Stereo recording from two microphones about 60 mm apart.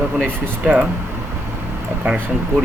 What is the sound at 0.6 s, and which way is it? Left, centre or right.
Speech, right.